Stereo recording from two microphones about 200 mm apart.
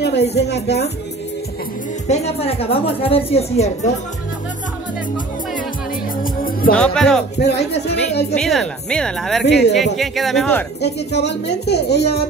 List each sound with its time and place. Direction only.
0.0 s a sound: 55° left (ahead or behind)
0.4 s a woman's voice: 55° left (ahead or behind)
2.0 s a woman's voice: 30° left (ahead or behind)
6.2 s music: 45° left (ahead or behind)
6.7 s a woman's voice: 5° left (ahead or behind)
7.3 s a woman's voice: 55° left (ahead or behind)
8.4 s a woman's voice: centre (ahead or behind)
9.4 s a woman's voice: 55° left (ahead or behind)
9.9 s a woman's voice: centre (ahead or behind)
10.8 s a woman's voice: 55° left (ahead or behind)